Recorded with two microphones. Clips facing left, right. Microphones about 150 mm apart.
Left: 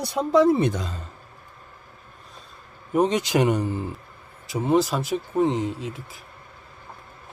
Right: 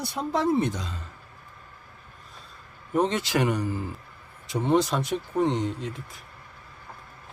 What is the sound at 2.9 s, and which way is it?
Speech, 15° left (ahead or behind).